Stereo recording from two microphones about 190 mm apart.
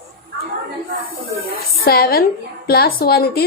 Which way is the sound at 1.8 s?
55° left (ahead or behind).